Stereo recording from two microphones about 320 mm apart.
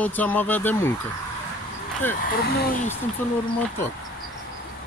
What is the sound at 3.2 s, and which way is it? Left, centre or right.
Speech, centre.